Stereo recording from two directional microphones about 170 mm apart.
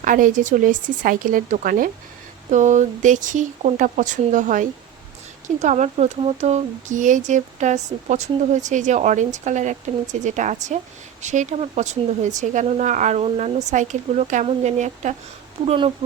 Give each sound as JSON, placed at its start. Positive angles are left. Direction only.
{"t": 0.0, "sound": "speech", "side_deg": -50}